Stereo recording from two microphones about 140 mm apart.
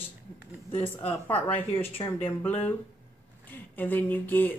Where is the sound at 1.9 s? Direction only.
40° left (ahead or behind).